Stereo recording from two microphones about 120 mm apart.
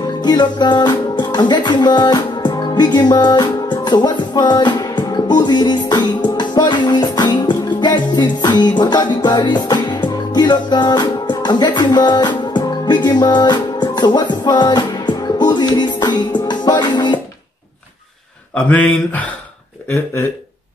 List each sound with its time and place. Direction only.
0.0 s music: 35° left (ahead or behind)
18.5 s speech: 10° left (ahead or behind)